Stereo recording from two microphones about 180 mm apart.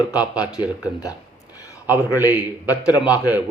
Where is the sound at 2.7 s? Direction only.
20° left (ahead or behind).